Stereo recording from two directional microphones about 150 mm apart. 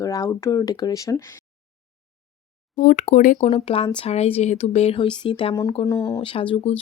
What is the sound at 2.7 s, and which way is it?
Speech, 60° left (ahead or behind).